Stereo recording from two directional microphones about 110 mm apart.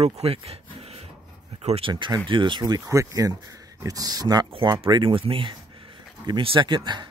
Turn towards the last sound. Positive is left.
turn(degrees=-45)  # may be behind; listen again after turning